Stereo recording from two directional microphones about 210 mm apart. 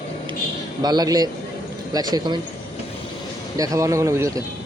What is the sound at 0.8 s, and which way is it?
A man's voice, 20° right (ahead or behind).